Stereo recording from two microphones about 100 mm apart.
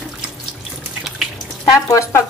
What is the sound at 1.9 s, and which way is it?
Speech, 30° left (ahead or behind).